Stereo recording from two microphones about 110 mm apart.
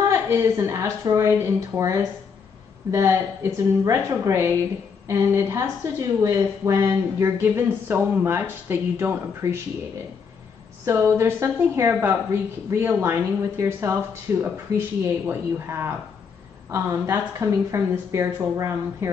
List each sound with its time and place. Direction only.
0.1 s a woman's voice: 25° right (ahead or behind)
10.9 s a woman's voice: 25° right (ahead or behind)